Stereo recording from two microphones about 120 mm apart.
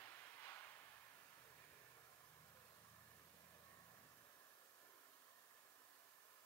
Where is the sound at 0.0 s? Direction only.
20° left (ahead or behind).